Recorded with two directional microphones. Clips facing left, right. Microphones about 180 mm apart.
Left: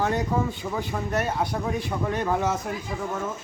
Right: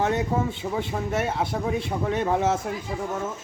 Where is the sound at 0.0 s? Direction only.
25° right (ahead or behind).